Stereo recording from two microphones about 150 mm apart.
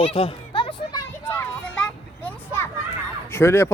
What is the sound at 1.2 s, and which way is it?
Vehicle, 10° left (ahead or behind).